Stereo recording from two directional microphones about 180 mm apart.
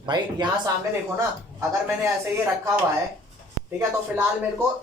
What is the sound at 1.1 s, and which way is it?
Speech, 15° right (ahead or behind).